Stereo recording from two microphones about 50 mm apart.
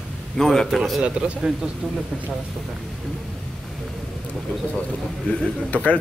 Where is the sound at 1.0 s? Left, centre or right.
Right.